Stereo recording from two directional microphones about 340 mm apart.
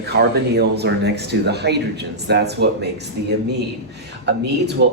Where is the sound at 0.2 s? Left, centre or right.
Right.